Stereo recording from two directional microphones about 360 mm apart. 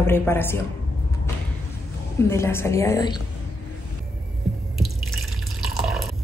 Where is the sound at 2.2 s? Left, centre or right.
Centre.